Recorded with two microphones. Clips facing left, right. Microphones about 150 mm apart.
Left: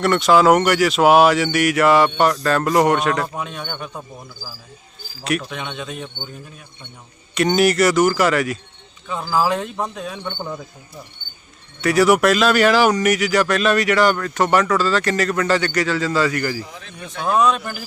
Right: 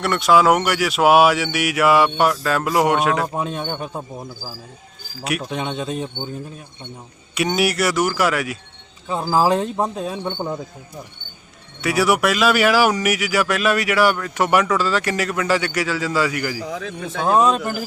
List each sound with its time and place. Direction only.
0.0 s speech: centre (ahead or behind)
3.4 s speech: 30° right (ahead or behind)
5.4 s speech: 35° right (ahead or behind)
7.3 s speech: 5° right (ahead or behind)
9.0 s speech: 35° right (ahead or behind)
11.8 s speech: 5° right (ahead or behind)
16.6 s speech: 90° right
17.3 s speech: 35° right (ahead or behind)